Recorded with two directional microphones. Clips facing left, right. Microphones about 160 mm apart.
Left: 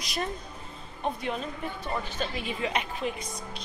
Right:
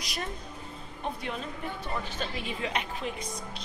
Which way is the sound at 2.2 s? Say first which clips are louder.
Left 2 dB; 5° left (ahead or behind).